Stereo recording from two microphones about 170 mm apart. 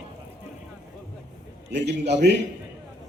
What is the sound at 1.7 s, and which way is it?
Speech, 80° right.